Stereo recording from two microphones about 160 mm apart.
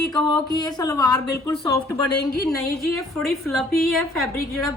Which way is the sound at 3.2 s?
Centre (ahead or behind).